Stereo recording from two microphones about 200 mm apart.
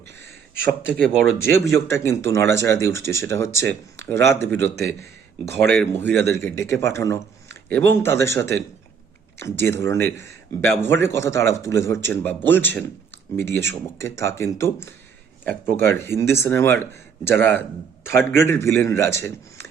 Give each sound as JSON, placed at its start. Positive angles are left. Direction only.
{"t": 1.0, "sound": "speech", "side_deg": 0}
{"t": 1.9, "sound": "speech", "side_deg": 15}
{"t": 4.8, "sound": "speech", "side_deg": -55}
{"t": 5.7, "sound": "speech", "side_deg": 10}